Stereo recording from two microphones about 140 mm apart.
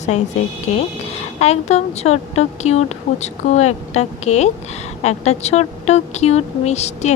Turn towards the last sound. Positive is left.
turn(degrees=50)  # may be behind; listen again after turning